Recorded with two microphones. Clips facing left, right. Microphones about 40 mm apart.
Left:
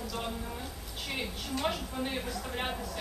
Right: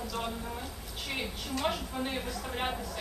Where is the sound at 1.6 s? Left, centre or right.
Centre.